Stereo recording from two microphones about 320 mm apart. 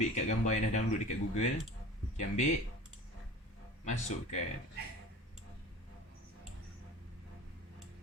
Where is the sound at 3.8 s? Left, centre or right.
Left.